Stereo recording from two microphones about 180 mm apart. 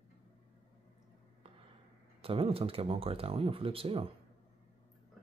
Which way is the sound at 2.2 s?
30° right (ahead or behind).